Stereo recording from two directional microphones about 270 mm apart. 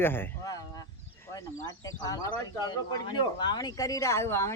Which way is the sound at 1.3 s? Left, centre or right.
Centre.